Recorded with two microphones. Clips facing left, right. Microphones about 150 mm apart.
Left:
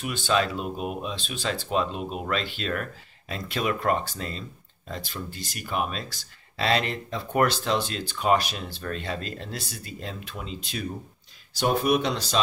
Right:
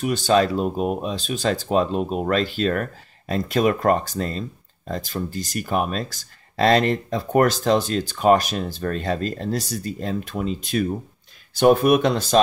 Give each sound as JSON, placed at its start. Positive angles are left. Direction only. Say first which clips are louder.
{"t": 0.0, "sound": "speech", "louder": "right 7 dB", "side_deg": -40}